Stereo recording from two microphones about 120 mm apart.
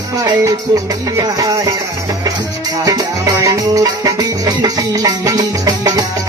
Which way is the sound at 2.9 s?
35° right (ahead or behind).